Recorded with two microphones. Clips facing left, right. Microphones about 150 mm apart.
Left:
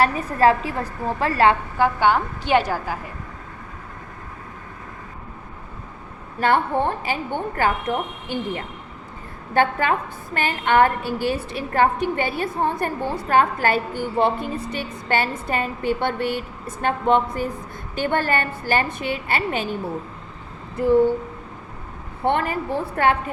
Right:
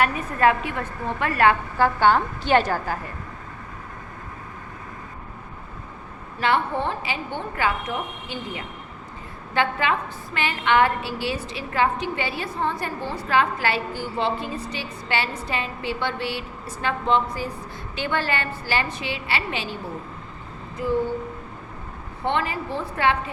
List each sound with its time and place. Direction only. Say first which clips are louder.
0.0 s a woman's voice: left 3 dB; 35° left (ahead or behind)
1.8 s a woman's voice: even; 15° left (ahead or behind)
6.4 s a woman's voice: left 3 dB; 50° left (ahead or behind)
22.2 s a woman's voice: left 3 dB; 50° left (ahead or behind)